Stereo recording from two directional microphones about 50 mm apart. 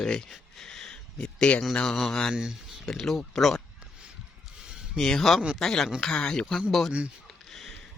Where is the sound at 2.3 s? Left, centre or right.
Centre.